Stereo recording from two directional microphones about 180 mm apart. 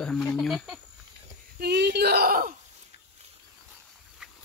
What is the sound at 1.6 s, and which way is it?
Speech, 65° right (ahead or behind).